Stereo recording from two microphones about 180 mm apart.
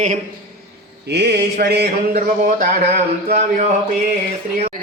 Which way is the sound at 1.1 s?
65° right (ahead or behind).